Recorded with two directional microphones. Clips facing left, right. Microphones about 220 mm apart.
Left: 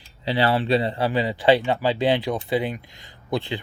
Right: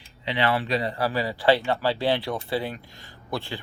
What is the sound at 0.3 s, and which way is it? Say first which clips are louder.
Speech: left 4 dB; 35° left (ahead or behind).